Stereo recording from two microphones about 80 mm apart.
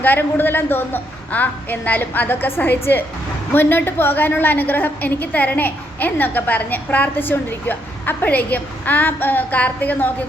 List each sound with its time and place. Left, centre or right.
0.0 s a woman's voice: left